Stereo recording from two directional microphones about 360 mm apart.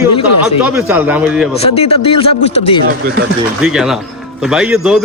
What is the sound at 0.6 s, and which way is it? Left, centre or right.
Speech, centre.